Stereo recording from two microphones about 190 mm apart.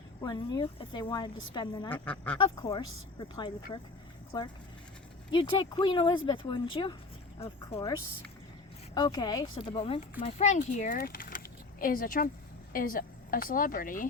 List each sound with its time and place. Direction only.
0.2 s a woman's voice: 20° left (ahead or behind)
1.9 s speech: 10° left (ahead or behind)
2.4 s a woman's voice: 25° left (ahead or behind); by 14.1 s 45° left (ahead or behind)